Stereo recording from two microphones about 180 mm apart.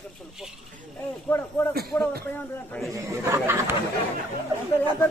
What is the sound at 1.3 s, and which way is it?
Speech, 15° left (ahead or behind).